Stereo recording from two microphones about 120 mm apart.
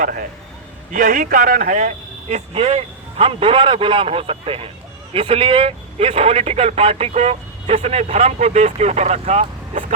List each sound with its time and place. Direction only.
1.2 s speech: 90° right
2.5 s a man's voice: 60° right (ahead or behind); by 9.8 s 80° right